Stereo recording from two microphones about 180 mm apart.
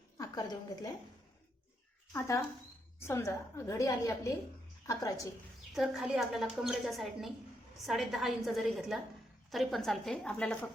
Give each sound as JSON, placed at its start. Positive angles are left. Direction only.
{"t": 0.2, "sound": "a woman's voice", "side_deg": 20}
{"t": 2.1, "sound": "a woman's voice", "side_deg": 15}
{"t": 5.7, "sound": "a woman's voice", "side_deg": 0}